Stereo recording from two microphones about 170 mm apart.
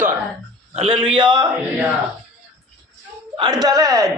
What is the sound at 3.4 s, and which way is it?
Speech, 25° right (ahead or behind).